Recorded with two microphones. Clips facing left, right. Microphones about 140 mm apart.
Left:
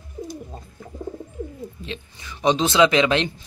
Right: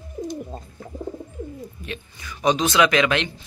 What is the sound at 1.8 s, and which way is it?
Speech, 25° left (ahead or behind).